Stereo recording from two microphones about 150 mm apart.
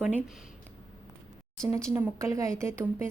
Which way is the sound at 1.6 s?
20° right (ahead or behind).